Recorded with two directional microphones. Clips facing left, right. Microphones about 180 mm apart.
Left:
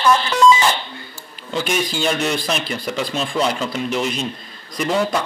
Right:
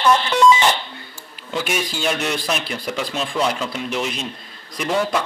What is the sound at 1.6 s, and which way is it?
Speech, 5° right (ahead or behind).